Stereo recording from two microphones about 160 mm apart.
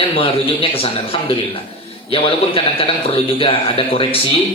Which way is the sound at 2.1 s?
35° left (ahead or behind).